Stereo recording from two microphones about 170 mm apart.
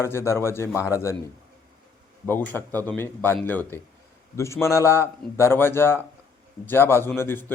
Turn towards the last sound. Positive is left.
turn(degrees=10)  # may be behind; listen again after turning